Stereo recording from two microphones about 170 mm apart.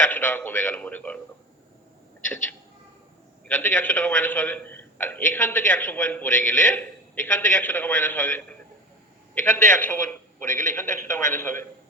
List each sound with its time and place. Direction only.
0.1 s a man's voice: 10° left (ahead or behind)
3.4 s a man's voice: 10° left (ahead or behind)
10.5 s a man's voice: 45° right (ahead or behind)
10.8 s a man's voice: 15° left (ahead or behind)